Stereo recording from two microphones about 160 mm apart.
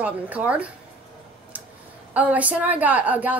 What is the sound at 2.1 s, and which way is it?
A woman's voice, 10° right (ahead or behind).